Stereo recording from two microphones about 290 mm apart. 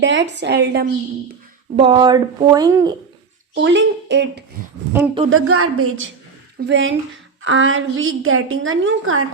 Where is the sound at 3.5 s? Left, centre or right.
Right.